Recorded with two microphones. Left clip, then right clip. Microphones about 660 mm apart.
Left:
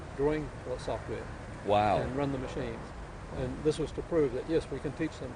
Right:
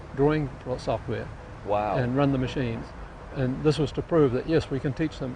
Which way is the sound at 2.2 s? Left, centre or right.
Right.